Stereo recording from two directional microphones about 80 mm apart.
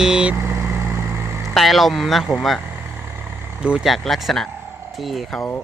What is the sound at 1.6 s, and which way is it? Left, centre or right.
Speech, centre.